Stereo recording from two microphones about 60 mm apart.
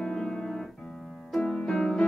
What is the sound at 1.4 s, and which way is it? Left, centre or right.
Music, centre.